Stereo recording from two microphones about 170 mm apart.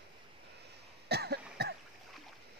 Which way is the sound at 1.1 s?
75° right (ahead or behind).